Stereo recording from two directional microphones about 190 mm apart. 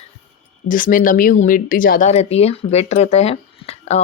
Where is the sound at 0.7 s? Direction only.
45° left (ahead or behind).